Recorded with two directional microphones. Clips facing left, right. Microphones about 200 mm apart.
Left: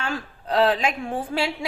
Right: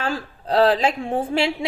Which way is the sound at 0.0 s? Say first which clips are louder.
Right 3 dB; 35° right (ahead or behind).